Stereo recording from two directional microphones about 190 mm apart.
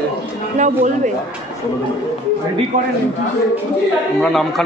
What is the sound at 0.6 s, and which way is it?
Speech, 40° right (ahead or behind).